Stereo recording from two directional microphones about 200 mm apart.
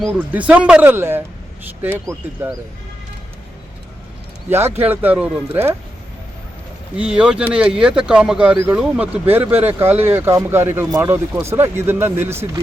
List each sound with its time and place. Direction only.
0.0 s speech: 5° right (ahead or behind)
4.4 s speech: 10° right (ahead or behind)
6.9 s speech: 5° right (ahead or behind)